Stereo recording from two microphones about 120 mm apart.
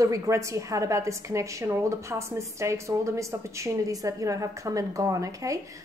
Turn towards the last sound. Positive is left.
turn(degrees=-25)  # may be behind; listen again after turning